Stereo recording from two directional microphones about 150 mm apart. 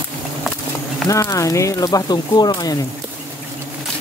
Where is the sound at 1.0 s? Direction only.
20° left (ahead or behind).